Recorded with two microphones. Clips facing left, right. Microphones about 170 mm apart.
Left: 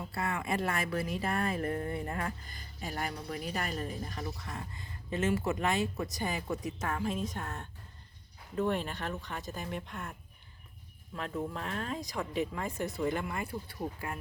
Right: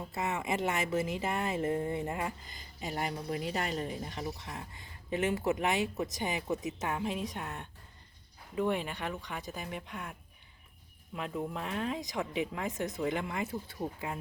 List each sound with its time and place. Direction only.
0.1 s speech: 20° right (ahead or behind)
11.5 s speech: 15° right (ahead or behind)